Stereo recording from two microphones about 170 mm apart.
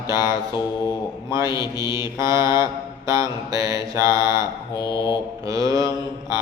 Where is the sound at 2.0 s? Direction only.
20° right (ahead or behind).